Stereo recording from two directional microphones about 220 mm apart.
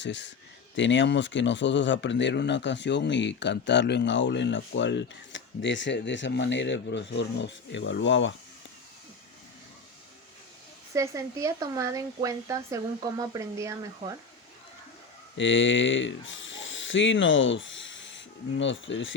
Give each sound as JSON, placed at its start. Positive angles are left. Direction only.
{"t": 0.0, "sound": "speech", "side_deg": 55}
{"t": 10.9, "sound": "speech", "side_deg": -15}
{"t": 15.4, "sound": "speech", "side_deg": 55}